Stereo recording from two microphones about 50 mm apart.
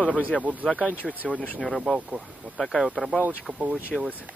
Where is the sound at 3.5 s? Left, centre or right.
Right.